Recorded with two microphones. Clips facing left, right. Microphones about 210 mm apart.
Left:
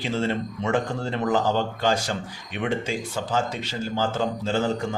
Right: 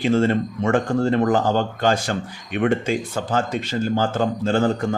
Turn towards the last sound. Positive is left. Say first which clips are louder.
# right 5 dB
turn(degrees=-55)  # may be behind; listen again after turning